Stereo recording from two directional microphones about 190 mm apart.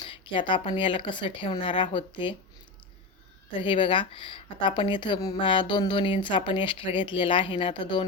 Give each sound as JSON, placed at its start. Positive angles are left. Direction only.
{"t": 0.1, "sound": "speech", "side_deg": 25}
{"t": 3.6, "sound": "speech", "side_deg": 25}